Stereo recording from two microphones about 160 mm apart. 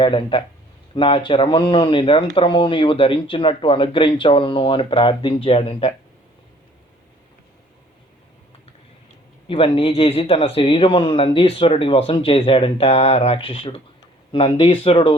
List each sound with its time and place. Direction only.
0.0 s speech: 30° left (ahead or behind)
9.5 s speech: 35° left (ahead or behind)